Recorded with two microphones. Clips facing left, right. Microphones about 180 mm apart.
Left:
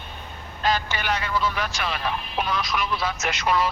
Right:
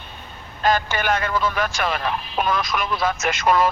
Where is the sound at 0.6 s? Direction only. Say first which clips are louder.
Right 4 dB; 50° right (ahead or behind).